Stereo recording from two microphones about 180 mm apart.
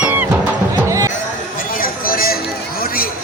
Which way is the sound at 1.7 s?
50° left (ahead or behind).